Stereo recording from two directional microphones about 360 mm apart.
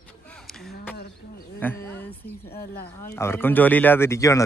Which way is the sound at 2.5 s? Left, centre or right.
Left.